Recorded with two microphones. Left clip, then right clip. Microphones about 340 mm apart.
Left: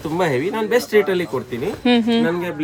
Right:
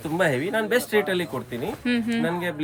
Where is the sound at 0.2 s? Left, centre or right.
Centre.